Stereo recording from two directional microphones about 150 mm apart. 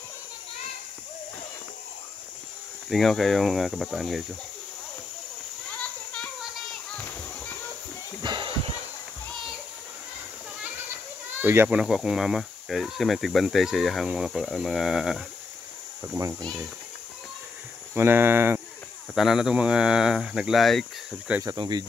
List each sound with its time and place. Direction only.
2.9 s speech: centre (ahead or behind)
5.8 s children playing: 5° left (ahead or behind)
8.2 s a sound: 30° right (ahead or behind)
11.3 s speech: 15° right (ahead or behind)
16.1 s speech: 20° right (ahead or behind)
17.9 s speech: 15° right (ahead or behind)
19.1 s speech: 5° right (ahead or behind)
21.4 s speech: 25° right (ahead or behind)